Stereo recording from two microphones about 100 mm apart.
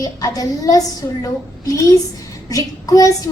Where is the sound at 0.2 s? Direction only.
35° left (ahead or behind).